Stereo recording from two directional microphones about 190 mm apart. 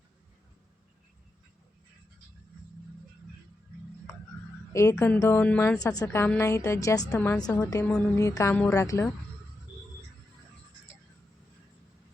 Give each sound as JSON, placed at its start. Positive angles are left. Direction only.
{"t": 4.7, "sound": "a woman's voice", "side_deg": 15}
{"t": 7.3, "sound": "a woman's voice", "side_deg": 20}